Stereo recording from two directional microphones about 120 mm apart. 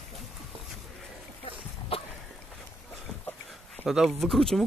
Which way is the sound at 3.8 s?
Centre (ahead or behind).